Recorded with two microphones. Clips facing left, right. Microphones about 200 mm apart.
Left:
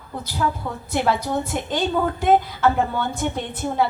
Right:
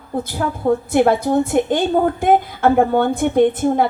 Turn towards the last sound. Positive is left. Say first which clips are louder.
# right 9 dB
turn(degrees=-50)  # may be behind; listen again after turning